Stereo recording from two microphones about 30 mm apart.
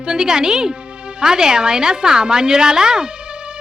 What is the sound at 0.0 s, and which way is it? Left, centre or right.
A woman's voice, right.